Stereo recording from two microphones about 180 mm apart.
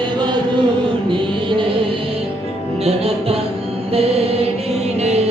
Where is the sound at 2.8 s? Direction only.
35° right (ahead or behind).